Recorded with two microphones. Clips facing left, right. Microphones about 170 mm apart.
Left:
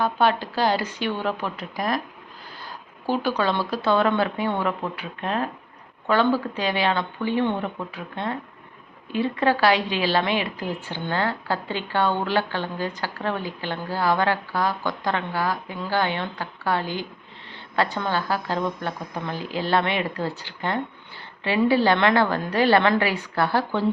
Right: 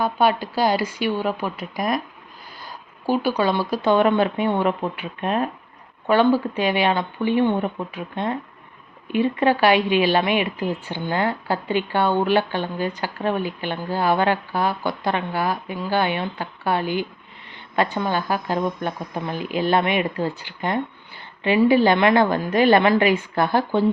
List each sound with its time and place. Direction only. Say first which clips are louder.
0.0 s a woman's voice: right 2 dB; 10° right (ahead or behind)
3.1 s a woman's voice: right 3 dB; 10° right (ahead or behind)
9.4 s a woman's voice: right 2 dB; 15° right (ahead or behind)